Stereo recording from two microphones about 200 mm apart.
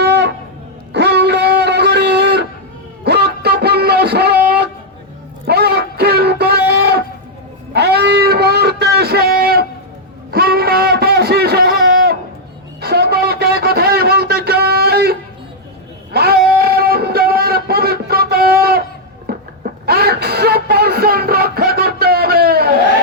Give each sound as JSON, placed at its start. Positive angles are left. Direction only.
{"t": 0.0, "sound": "music", "side_deg": -60}
{"t": 0.9, "sound": "a sound", "side_deg": -55}
{"t": 19.8, "sound": "music", "side_deg": -50}